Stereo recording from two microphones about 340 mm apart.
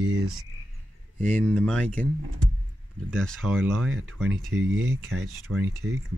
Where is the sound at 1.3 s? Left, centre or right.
Centre.